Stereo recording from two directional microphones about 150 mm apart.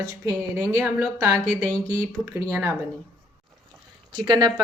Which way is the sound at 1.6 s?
15° right (ahead or behind).